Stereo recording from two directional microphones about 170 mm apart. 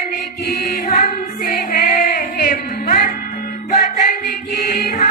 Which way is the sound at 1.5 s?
50° left (ahead or behind).